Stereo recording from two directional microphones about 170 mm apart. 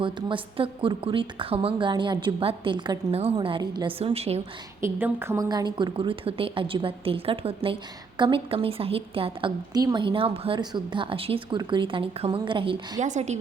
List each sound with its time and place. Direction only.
0.0 s a woman's voice: 30° right (ahead or behind)
4.8 s a woman's voice: 15° right (ahead or behind); by 13.0 s 30° right (ahead or behind)
13.0 s speech: 45° right (ahead or behind)